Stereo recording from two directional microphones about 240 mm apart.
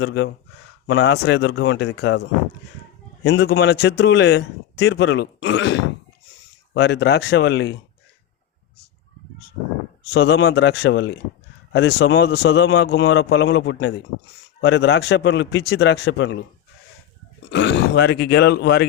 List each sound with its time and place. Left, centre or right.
0.0 s speech: left
3.2 s speech: left
10.1 s speech: left
17.4 s speech: left